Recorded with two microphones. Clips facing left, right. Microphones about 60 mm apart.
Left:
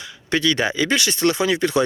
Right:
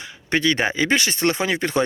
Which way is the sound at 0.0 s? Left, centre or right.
Right.